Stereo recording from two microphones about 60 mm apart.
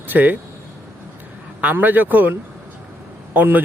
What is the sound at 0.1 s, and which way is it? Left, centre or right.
Speech, right.